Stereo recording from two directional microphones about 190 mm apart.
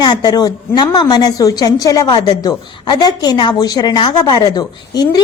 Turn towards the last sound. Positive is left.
turn(degrees=20)  # may be behind; listen again after turning